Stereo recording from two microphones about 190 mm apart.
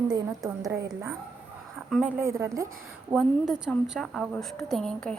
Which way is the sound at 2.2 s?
15° right (ahead or behind).